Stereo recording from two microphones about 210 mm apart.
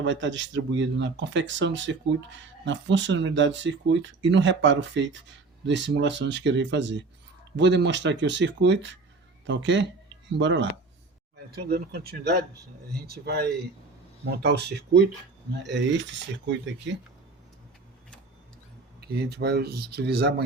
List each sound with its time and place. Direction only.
0.0 s speech: 60° right (ahead or behind)
14.3 s speech: 55° right (ahead or behind)
18.9 s speech: 50° right (ahead or behind)